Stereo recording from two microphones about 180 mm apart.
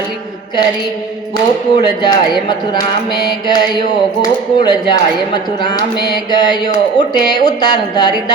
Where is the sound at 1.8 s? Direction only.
25° left (ahead or behind).